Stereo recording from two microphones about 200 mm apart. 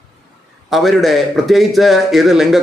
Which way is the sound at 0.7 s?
Centre (ahead or behind).